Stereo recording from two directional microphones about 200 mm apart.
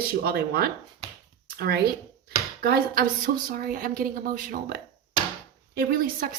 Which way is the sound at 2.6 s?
50° right (ahead or behind).